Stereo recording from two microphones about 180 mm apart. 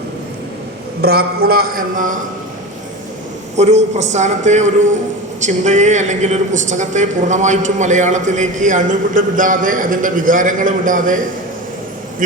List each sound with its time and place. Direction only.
1.0 s a man's voice: 60° right (ahead or behind)
3.6 s a man's voice: 40° right (ahead or behind)